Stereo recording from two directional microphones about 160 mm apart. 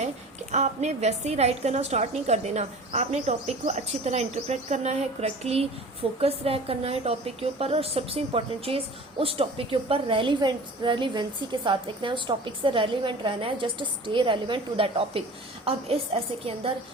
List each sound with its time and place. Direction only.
0.5 s a woman's voice: 45° right (ahead or behind)